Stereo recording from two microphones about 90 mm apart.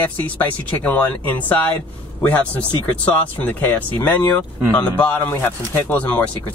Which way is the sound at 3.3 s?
20° left (ahead or behind).